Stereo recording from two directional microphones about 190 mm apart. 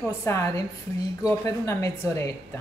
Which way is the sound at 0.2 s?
15° left (ahead or behind).